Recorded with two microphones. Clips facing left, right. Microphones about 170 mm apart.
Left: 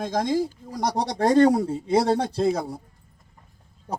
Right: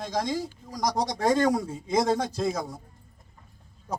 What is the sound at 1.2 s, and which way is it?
Speech, 35° left (ahead or behind).